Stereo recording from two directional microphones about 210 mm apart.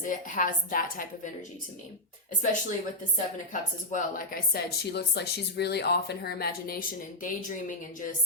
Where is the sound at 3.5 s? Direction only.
40° left (ahead or behind).